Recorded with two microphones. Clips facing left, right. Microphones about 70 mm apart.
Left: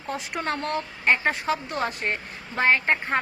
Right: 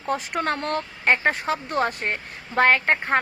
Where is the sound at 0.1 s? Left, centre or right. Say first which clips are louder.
Right 4 dB; right.